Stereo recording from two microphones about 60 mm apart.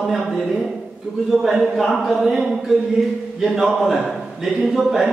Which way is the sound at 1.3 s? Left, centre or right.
Centre.